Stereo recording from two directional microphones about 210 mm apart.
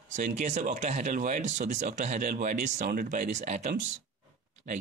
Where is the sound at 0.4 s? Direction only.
35° right (ahead or behind).